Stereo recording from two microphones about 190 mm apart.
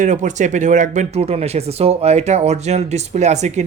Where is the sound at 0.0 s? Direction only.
40° right (ahead or behind).